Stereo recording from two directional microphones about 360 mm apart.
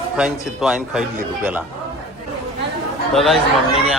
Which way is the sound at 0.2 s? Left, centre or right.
Centre.